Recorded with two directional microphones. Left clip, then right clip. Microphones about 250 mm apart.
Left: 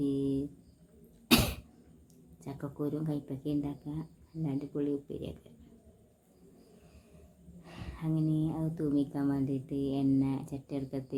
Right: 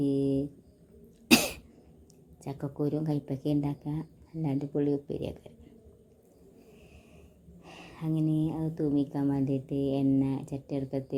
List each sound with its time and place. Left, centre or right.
0.0 s mantra: centre
1.3 s cough: centre
2.4 s speech: centre
7.6 s a woman's voice: centre